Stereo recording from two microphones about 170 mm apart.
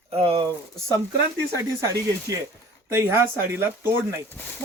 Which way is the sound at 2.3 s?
20° right (ahead or behind).